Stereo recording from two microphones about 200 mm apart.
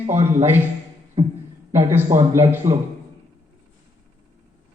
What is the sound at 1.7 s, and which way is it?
A man's voice, 10° right (ahead or behind).